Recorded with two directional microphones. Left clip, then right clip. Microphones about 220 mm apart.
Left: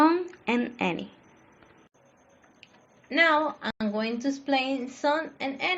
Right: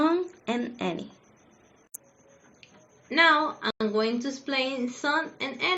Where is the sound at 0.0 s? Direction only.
15° left (ahead or behind).